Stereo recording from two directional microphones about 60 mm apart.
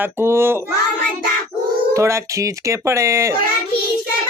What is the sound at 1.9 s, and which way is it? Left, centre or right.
Speech, right.